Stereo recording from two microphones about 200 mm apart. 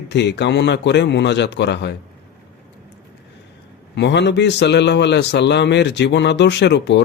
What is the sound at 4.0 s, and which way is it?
A man's voice, 60° left (ahead or behind).